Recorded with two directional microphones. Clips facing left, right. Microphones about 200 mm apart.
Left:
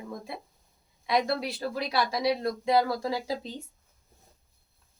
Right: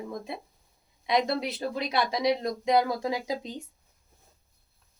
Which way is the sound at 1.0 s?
20° right (ahead or behind).